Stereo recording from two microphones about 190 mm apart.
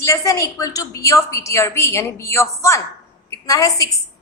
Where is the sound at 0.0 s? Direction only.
15° left (ahead or behind).